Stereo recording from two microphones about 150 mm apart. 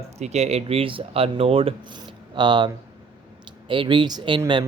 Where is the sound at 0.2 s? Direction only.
45° right (ahead or behind).